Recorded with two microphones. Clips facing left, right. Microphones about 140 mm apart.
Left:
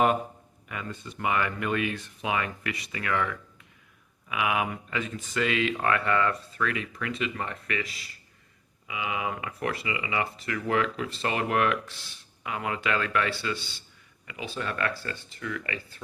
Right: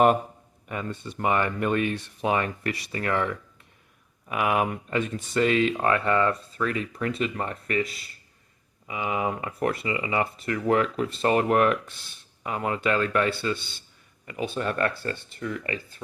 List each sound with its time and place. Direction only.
0.7 s speech: 30° right (ahead or behind)
4.3 s speech: 45° right (ahead or behind)
8.9 s speech: 40° right (ahead or behind)
14.3 s speech: 50° right (ahead or behind)